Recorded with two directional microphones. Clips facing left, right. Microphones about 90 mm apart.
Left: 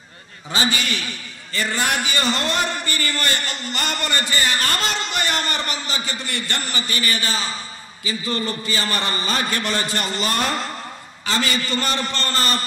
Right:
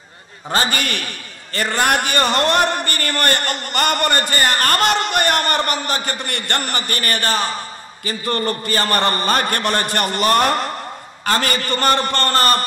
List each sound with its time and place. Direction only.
0.5 s a man's voice: 50° right (ahead or behind)